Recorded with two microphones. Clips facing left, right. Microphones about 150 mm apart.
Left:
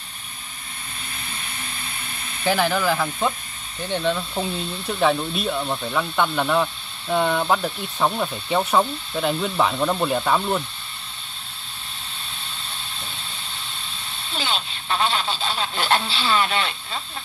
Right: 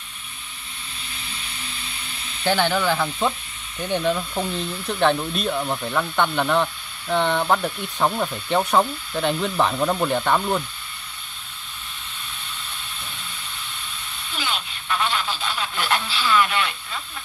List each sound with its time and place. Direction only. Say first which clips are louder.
1.1 s vehicle: left 2 dB; 50° left (ahead or behind)
2.4 s speech: even; centre (ahead or behind)
4.8 s speech: even; 5° left (ahead or behind)
14.1 s a sound: left 2 dB; 30° left (ahead or behind)